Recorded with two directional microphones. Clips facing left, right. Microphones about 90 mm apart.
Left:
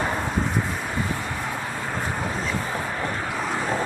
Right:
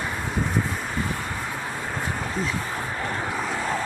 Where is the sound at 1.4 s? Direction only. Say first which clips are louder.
Left 1 dB; centre (ahead or behind).